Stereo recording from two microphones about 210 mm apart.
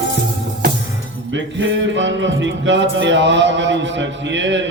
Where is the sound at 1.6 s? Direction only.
60° right (ahead or behind).